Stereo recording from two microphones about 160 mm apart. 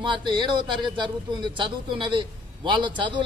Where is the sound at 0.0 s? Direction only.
30° right (ahead or behind).